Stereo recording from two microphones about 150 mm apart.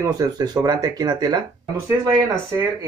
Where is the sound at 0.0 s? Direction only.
25° right (ahead or behind).